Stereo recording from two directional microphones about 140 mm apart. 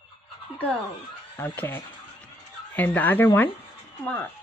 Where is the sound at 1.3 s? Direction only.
15° left (ahead or behind).